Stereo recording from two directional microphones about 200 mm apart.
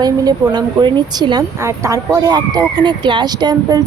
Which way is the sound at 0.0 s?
20° right (ahead or behind).